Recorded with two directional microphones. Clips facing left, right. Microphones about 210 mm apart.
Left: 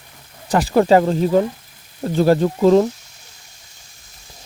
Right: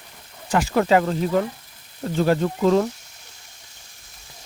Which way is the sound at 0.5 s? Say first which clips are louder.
Left 5 dB; 35° left (ahead or behind).